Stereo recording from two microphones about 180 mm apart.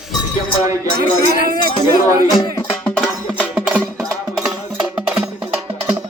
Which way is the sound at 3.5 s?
10° right (ahead or behind).